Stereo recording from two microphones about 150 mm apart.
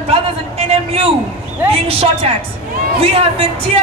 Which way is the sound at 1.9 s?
40° right (ahead or behind).